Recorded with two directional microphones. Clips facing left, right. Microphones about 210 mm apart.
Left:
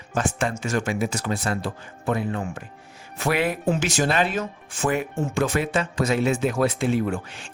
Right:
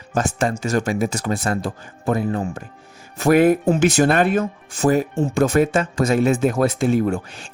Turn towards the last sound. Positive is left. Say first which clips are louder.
# right 5 dB
turn(degrees=-40)  # may be behind; listen again after turning